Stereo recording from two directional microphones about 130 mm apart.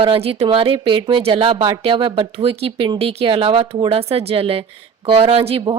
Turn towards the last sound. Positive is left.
turn(degrees=-40)  # may be behind; listen again after turning